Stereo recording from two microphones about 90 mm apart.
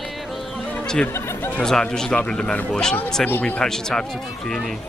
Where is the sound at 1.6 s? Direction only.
5° left (ahead or behind).